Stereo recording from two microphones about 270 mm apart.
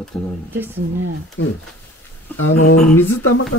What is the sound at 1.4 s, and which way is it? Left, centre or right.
Speech, left.